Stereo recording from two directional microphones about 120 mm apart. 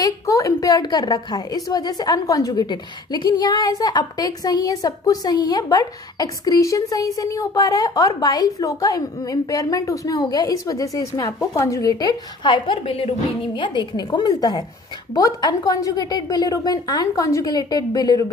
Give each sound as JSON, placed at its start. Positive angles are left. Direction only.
{"t": 0.0, "sound": "a woman's voice", "side_deg": 30}